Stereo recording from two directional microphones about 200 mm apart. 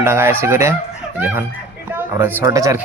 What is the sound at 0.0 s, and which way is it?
Speech, 10° right (ahead or behind).